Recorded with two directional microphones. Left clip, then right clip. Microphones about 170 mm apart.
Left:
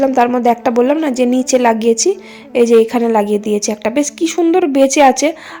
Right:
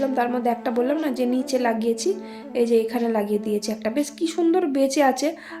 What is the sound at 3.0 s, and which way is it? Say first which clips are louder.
A woman's voice: left 10 dB; 35° left (ahead or behind).